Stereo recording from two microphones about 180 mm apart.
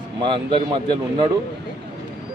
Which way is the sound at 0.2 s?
25° right (ahead or behind).